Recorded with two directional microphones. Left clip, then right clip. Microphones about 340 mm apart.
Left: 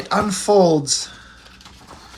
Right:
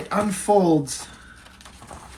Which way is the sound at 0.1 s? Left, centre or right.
Centre.